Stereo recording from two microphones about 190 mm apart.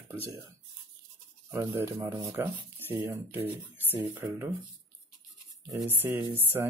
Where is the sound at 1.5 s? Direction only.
15° right (ahead or behind).